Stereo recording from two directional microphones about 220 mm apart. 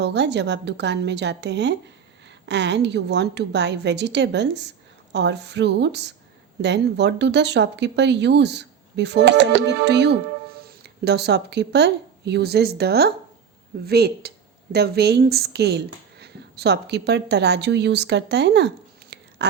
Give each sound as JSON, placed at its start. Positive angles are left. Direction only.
{"t": 0.0, "sound": "a woman's voice", "side_deg": -50}
{"t": 19.1, "sound": "biting", "side_deg": -50}